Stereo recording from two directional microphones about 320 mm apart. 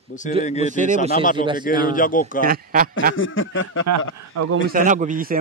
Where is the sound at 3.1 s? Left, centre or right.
Left.